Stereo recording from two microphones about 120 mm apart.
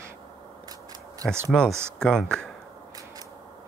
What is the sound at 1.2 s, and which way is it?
Speech, 5° left (ahead or behind).